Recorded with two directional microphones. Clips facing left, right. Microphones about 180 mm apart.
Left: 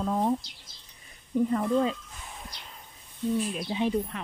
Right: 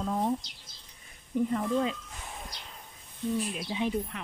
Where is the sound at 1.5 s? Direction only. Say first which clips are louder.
Left 4 dB; 40° left (ahead or behind).